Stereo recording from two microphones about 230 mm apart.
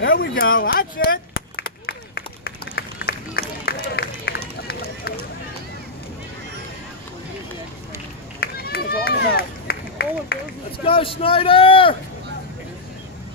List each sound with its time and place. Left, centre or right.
0.0 s a sound: left
8.4 s run: left
10.9 s a man's voice: left